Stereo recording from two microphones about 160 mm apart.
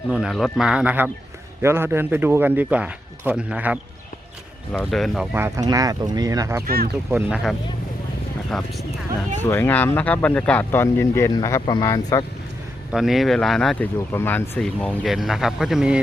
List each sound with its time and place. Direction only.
0.1 s speech: centre (ahead or behind)
4.7 s speech: 5° left (ahead or behind)
5.5 s speech: 25° right (ahead or behind)
6.7 s speech: 70° right (ahead or behind)
7.1 s speech: 10° right (ahead or behind)
8.5 s speech: centre (ahead or behind)
9.4 s speech: 10° left (ahead or behind)
12.9 s speech: centre (ahead or behind)
14.1 s speech: 15° left (ahead or behind); by 16.0 s 5° right (ahead or behind)